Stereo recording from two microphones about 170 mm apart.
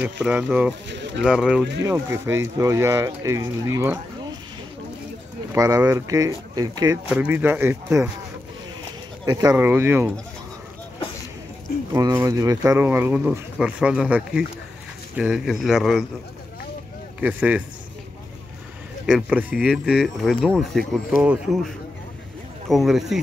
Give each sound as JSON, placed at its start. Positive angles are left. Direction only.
{"t": 0.0, "sound": "speech", "side_deg": -10}
{"t": 0.8, "sound": "pigeon", "side_deg": -90}
{"t": 1.2, "sound": "speech", "side_deg": -5}
{"t": 1.9, "sound": "speech", "side_deg": -15}
{"t": 5.5, "sound": "speech", "side_deg": -20}
{"t": 7.1, "sound": "speech", "side_deg": -10}
{"t": 9.2, "sound": "speech", "side_deg": -20}
{"t": 11.9, "sound": "speech", "side_deg": -20}
{"t": 17.2, "sound": "speech", "side_deg": -10}
{"t": 19.0, "sound": "speech", "side_deg": -5}